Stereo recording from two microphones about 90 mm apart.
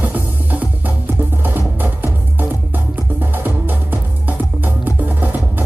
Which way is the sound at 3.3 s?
20° right (ahead or behind).